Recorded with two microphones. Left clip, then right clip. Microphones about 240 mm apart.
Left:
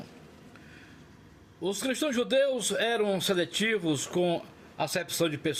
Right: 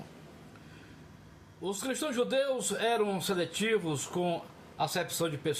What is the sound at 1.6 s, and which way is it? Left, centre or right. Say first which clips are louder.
Speech: left 4 dB; left.